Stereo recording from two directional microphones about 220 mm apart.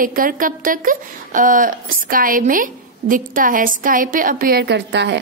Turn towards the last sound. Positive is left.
turn(degrees=-50)  # may be behind; listen again after turning